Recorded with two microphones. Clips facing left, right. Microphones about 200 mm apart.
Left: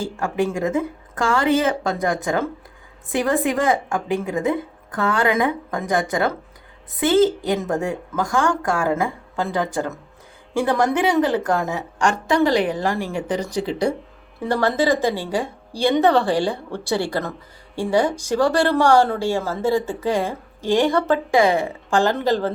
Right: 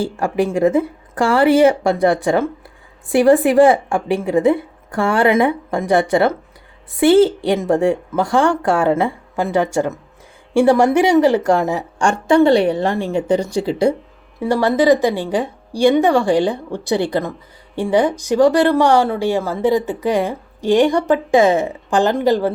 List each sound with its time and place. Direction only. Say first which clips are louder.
0.0 s a woman's voice: right 4 dB; 35° right (ahead or behind)
10.6 s a woman's voice: right 7 dB; 30° right (ahead or behind)
14.3 s a woman's voice: right 4 dB; 15° right (ahead or behind)